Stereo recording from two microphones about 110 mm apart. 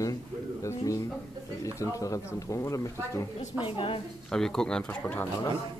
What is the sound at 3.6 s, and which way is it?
Speech, 55° left (ahead or behind).